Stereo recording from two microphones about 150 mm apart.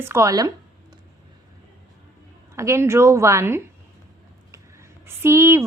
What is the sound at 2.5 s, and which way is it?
A woman's voice, 20° right (ahead or behind).